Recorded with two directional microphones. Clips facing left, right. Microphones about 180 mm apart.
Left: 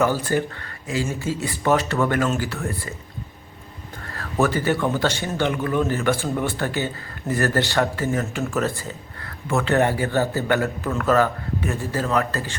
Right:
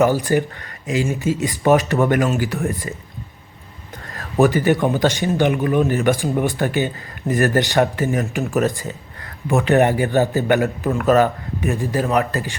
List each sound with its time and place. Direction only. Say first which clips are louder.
0.0 s a man's voice: right 4 dB; 15° right (ahead or behind)
4.1 s a man's voice: right 5 dB; 15° right (ahead or behind)